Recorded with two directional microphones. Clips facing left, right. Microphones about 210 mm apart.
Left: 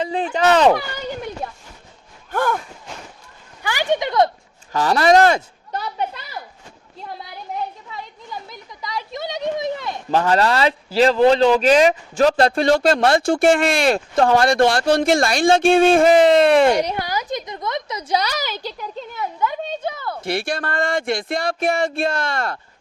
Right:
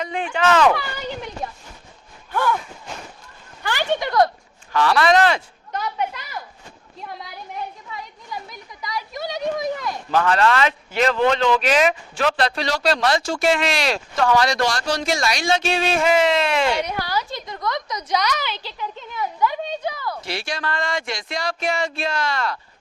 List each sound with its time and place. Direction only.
0.0 s speech: 35° left (ahead or behind)
2.3 s a sound: 45° left (ahead or behind)
3.6 s speech: 10° left (ahead or behind)
4.7 s a sound: 40° left (ahead or behind)
8.4 s speech: 25° left (ahead or behind); by 16.8 s 50° left (ahead or behind)
16.8 s a woman's voice: 25° left (ahead or behind); by 18.9 s 45° left (ahead or behind)
19.1 s a woman's voice: 25° left (ahead or behind)
20.2 s speech: 55° left (ahead or behind)